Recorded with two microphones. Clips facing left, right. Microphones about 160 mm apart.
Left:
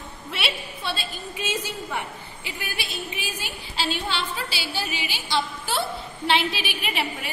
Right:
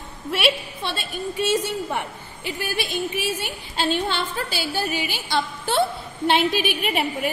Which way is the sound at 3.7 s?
50° right (ahead or behind).